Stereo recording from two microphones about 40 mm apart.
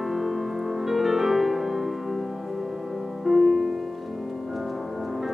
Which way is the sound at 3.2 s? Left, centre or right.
Centre.